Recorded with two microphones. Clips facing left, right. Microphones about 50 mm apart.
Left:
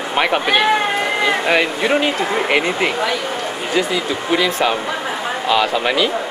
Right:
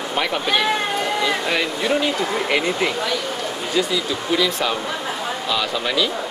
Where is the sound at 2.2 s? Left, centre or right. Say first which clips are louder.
Left 3 dB; left.